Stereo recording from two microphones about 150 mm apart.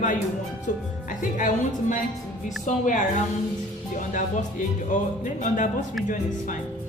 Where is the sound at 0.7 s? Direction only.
60° left (ahead or behind).